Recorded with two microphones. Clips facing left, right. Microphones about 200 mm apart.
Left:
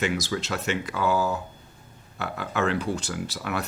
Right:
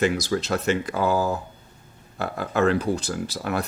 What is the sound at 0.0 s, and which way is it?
Speech, 40° right (ahead or behind).